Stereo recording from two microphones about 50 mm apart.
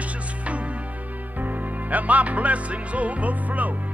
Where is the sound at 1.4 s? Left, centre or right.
Right.